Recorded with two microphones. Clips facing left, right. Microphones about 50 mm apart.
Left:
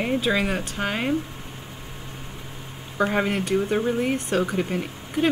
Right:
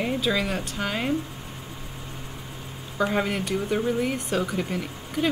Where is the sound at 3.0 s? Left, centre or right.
Centre.